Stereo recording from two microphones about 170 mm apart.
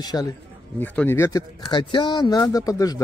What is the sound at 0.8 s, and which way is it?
A man's voice, 10° left (ahead or behind).